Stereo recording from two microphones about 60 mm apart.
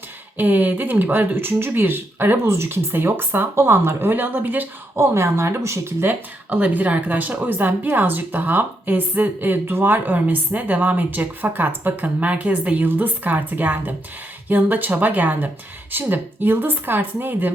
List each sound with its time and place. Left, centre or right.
0.3 s speech: right
2.4 s speech: right
4.9 s speech: right
6.0 s speech: right